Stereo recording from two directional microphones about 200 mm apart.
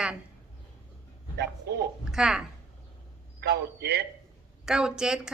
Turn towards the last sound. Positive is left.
turn(degrees=-5)  # may be behind; listen again after turning